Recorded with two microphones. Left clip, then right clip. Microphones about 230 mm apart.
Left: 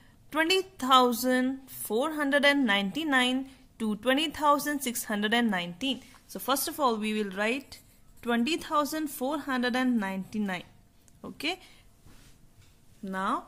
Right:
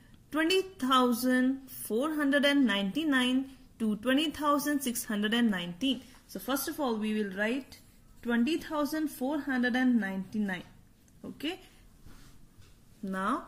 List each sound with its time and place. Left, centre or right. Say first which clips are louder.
0.3 s a woman's voice: left 2 dB; left
13.0 s a woman's voice: left 2 dB; left